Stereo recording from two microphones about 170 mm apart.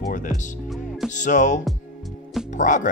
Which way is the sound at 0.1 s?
45° left (ahead or behind).